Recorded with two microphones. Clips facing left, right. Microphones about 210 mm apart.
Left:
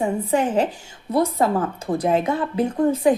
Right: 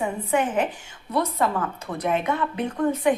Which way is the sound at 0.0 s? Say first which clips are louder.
Left 3 dB; 30° left (ahead or behind).